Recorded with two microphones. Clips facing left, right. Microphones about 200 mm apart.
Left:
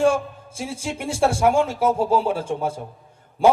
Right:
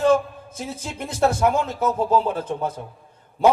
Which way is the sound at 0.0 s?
10° left (ahead or behind).